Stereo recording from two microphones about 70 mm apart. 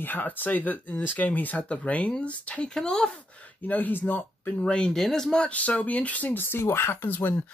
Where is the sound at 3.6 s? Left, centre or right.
Left.